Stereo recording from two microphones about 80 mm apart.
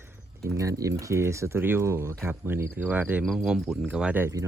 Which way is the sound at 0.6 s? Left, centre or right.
Right.